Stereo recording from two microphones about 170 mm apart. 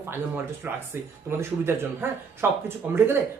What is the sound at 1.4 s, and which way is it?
Speech, 15° right (ahead or behind).